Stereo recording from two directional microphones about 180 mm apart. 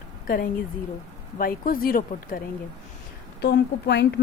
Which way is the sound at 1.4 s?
50° left (ahead or behind).